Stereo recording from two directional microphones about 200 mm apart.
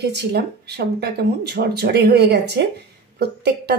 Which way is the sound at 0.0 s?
55° right (ahead or behind).